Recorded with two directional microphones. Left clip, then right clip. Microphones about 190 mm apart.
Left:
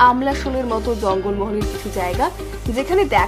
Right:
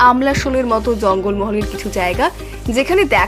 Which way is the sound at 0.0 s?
20° right (ahead or behind).